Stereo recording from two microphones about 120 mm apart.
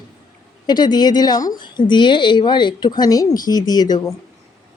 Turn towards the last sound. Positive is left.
turn(degrees=35)  # may be behind; listen again after turning